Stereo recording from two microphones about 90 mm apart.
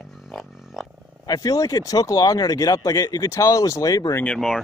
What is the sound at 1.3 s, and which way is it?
Speech, 45° left (ahead or behind).